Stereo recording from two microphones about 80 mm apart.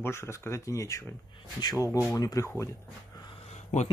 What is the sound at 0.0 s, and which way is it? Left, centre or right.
Speech, left.